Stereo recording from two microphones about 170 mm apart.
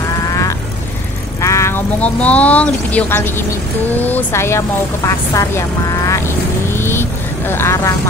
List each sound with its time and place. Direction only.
0.3 s vehicle: 20° left (ahead or behind)
1.4 s a woman's voice: 15° left (ahead or behind)
6.0 s vehicle: 15° left (ahead or behind)